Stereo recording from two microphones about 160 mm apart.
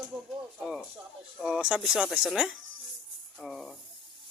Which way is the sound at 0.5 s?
Centre (ahead or behind).